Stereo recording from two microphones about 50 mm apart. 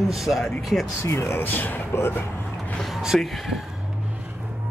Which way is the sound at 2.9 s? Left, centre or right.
Centre.